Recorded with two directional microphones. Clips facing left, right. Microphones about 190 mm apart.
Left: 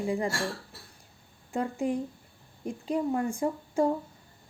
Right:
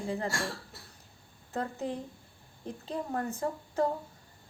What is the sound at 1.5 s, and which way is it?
A woman's voice, 15° left (ahead or behind).